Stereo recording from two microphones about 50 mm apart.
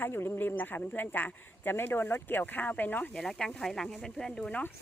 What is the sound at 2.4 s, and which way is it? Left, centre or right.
Speech, left.